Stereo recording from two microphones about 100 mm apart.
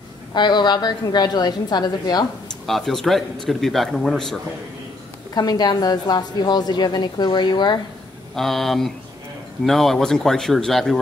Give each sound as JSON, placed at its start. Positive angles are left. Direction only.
{"t": 0.3, "sound": "a woman's voice", "side_deg": 45}
{"t": 2.6, "sound": "speech", "side_deg": 5}
{"t": 5.3, "sound": "a woman's voice", "side_deg": 40}
{"t": 8.4, "sound": "speech", "side_deg": 0}